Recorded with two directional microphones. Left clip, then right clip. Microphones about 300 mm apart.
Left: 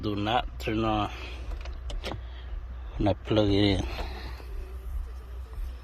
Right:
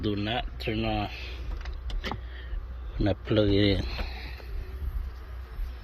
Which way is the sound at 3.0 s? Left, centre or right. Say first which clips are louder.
Left 1 dB; centre.